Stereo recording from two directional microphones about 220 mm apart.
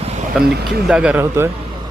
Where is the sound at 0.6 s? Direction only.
5° right (ahead or behind).